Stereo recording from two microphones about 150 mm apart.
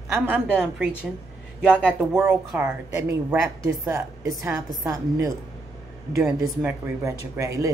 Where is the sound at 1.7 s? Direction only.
5° left (ahead or behind).